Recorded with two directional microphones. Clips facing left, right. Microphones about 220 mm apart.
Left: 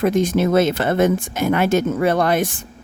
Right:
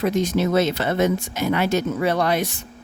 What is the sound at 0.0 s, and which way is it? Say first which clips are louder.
Speech: left 3 dB; 50° left (ahead or behind).